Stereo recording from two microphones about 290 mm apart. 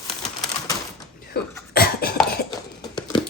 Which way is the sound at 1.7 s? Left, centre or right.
Left.